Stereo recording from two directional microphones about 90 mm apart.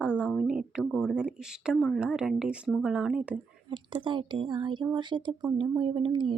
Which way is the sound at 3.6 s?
65° right (ahead or behind).